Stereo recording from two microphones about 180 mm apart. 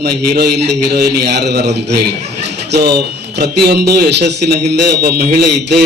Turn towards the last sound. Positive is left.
turn(degrees=-65)  # may be behind; listen again after turning